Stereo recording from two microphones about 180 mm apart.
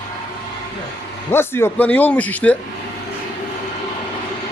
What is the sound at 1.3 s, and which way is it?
A man's voice, 15° left (ahead or behind).